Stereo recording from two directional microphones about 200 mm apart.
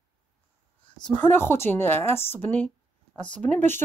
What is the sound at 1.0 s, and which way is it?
Speech, 10° left (ahead or behind).